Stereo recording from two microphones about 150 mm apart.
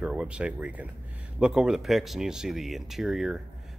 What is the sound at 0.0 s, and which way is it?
Speech, 5° right (ahead or behind).